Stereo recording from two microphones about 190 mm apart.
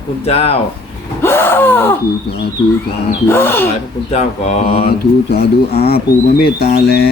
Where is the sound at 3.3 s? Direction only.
10° left (ahead or behind).